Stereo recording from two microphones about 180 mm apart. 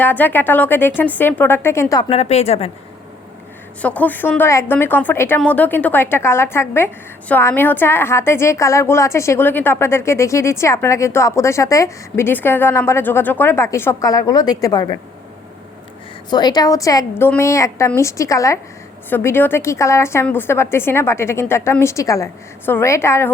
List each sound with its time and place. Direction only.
0.0 s a woman's voice: 10° left (ahead or behind)
2.0 s speech: 35° left (ahead or behind)
3.8 s a woman's voice: 10° left (ahead or behind)
16.3 s a woman's voice: 20° left (ahead or behind)